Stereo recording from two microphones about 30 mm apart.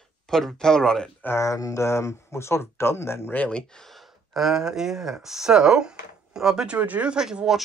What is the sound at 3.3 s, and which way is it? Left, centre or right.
Speech, left.